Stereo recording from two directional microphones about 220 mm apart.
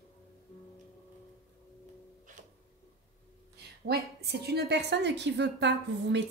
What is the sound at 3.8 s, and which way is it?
Speech, 45° right (ahead or behind).